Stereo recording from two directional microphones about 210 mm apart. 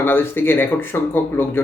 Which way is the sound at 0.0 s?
10° left (ahead or behind).